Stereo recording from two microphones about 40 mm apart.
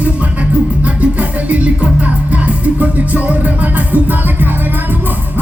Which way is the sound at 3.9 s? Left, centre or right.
Right.